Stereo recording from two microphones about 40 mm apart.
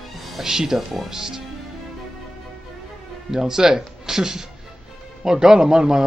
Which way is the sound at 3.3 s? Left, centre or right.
Centre.